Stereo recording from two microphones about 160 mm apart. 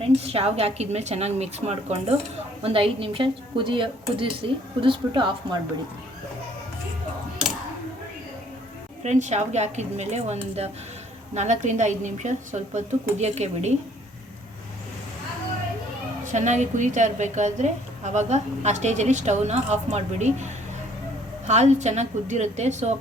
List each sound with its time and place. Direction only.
0.0 s a woman's voice: 40° right (ahead or behind)
9.0 s a woman's voice: 45° right (ahead or behind)
16.2 s a woman's voice: 50° right (ahead or behind)